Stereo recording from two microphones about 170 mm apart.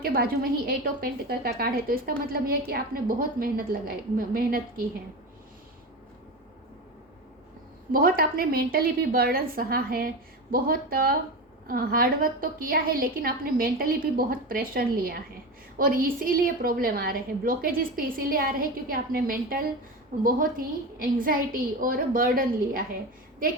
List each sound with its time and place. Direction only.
0.0 s a woman's voice: 60° right (ahead or behind)
7.9 s a woman's voice: 60° right (ahead or behind)